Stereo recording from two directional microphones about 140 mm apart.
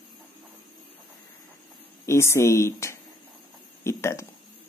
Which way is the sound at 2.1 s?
20° left (ahead or behind).